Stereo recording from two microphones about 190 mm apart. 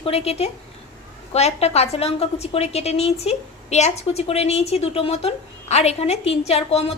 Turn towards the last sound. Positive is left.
turn(degrees=35)  # may be behind; listen again after turning